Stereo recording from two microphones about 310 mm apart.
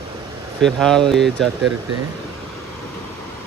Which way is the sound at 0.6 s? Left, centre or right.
Centre.